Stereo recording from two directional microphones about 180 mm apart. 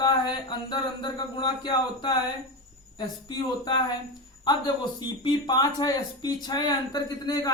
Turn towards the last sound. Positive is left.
turn(degrees=20)  # may be behind; listen again after turning